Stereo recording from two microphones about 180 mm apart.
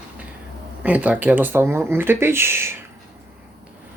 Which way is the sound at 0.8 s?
10° right (ahead or behind).